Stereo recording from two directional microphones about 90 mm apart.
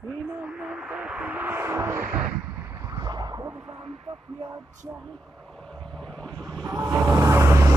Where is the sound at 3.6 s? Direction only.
90° right.